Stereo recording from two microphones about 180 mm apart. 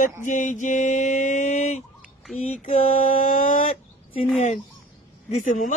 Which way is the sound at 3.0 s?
50° left (ahead or behind).